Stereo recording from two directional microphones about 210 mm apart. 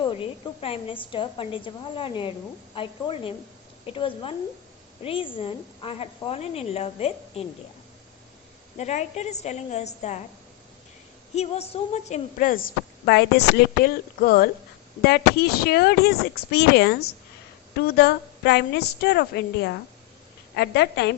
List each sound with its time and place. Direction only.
0.0 s a woman's voice: 25° left (ahead or behind)
8.8 s a woman's voice: 35° left (ahead or behind)
11.3 s a woman's voice: 30° left (ahead or behind); by 19.2 s 50° left (ahead or behind)
20.6 s a woman's voice: 55° left (ahead or behind)